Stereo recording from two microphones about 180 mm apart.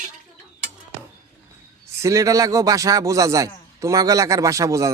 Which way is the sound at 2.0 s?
15° right (ahead or behind).